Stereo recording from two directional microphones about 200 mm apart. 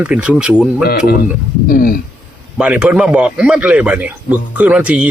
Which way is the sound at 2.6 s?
5° right (ahead or behind).